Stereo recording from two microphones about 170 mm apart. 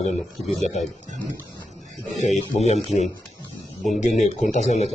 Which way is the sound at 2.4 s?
40° left (ahead or behind).